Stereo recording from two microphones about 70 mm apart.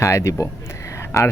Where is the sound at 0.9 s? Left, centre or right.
Left.